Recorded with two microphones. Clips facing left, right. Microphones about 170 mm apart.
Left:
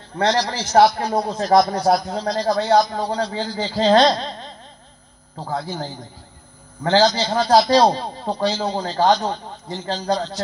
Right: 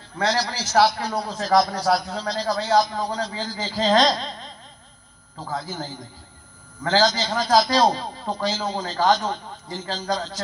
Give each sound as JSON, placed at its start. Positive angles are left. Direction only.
{"t": 0.2, "sound": "a man's voice", "side_deg": 35}